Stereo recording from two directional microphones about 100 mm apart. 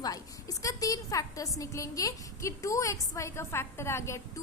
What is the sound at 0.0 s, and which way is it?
A woman's voice, 40° left (ahead or behind).